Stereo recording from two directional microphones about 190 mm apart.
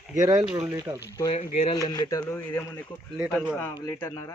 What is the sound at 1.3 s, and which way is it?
Speech, 30° left (ahead or behind).